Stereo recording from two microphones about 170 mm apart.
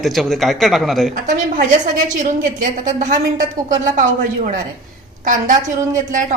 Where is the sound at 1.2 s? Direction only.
50° right (ahead or behind).